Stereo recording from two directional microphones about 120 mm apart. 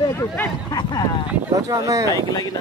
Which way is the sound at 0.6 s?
35° left (ahead or behind).